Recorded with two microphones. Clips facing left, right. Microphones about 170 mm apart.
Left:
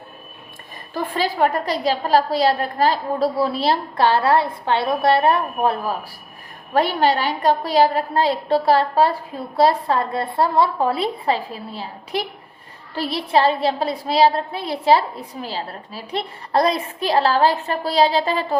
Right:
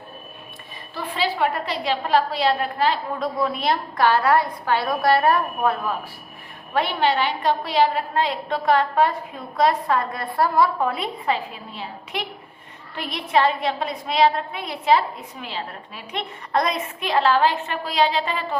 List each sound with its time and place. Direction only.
0.9 s a woman's voice: 45° left (ahead or behind); by 5.9 s 30° left (ahead or behind)
6.7 s a woman's voice: 40° left (ahead or behind)